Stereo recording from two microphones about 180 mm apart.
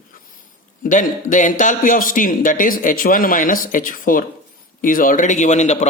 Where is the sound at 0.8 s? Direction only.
45° left (ahead or behind).